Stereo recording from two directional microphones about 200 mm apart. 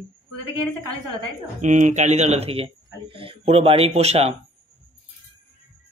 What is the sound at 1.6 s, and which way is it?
A man's voice, 35° right (ahead or behind).